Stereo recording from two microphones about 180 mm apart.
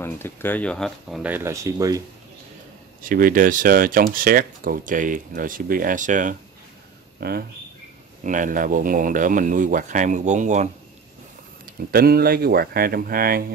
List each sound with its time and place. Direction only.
0.0 s speech: 10° left (ahead or behind); by 2.0 s 20° right (ahead or behind)
3.0 s speech: 50° right (ahead or behind)
7.2 s speech: 60° right (ahead or behind)
8.2 s speech: 45° right (ahead or behind)
11.9 s speech: 55° right (ahead or behind)